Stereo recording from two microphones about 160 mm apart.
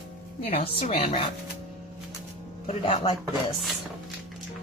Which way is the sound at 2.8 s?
35° left (ahead or behind).